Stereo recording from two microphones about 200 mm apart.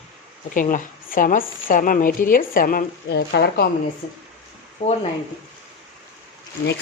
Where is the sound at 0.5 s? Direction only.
45° left (ahead or behind).